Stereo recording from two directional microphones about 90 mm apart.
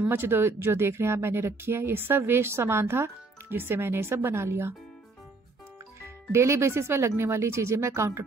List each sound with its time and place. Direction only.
0.1 s speech: 25° right (ahead or behind)
6.0 s speech: 30° right (ahead or behind)